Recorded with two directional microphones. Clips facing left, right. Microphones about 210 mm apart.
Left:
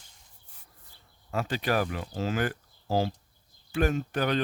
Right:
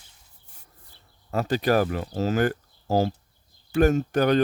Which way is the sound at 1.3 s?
40° right (ahead or behind).